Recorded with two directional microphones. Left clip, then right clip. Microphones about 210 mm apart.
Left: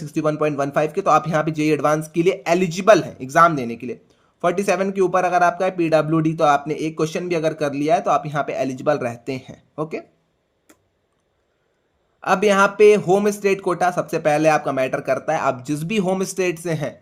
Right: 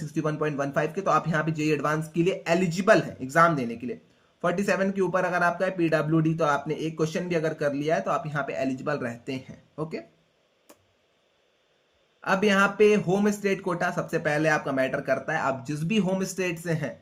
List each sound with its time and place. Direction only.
0.1 s speech: 45° left (ahead or behind)
12.2 s speech: 50° left (ahead or behind)